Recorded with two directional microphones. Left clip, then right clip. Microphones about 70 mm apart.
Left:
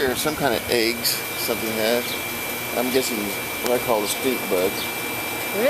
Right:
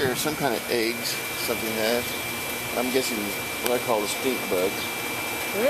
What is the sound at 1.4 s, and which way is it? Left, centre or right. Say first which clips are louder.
Speech: left 3 dB; centre.